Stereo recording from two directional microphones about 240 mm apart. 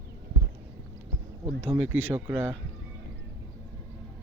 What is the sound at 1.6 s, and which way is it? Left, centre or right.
Speech, centre.